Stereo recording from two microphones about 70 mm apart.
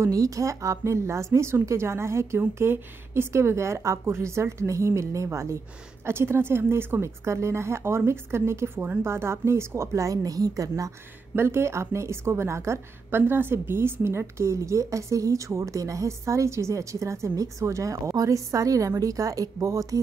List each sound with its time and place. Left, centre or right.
0.0 s a woman's voice: right
11.3 s a woman's voice: right